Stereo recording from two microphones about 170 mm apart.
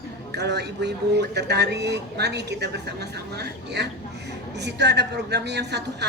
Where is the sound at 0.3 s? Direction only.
80° right.